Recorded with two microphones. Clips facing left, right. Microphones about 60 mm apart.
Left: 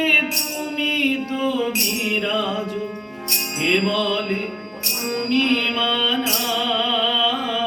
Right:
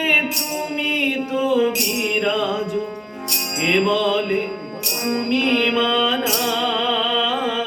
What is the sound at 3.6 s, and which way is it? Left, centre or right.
Music, right.